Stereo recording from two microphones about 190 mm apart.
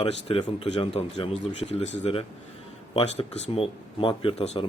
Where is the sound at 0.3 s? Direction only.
30° left (ahead or behind).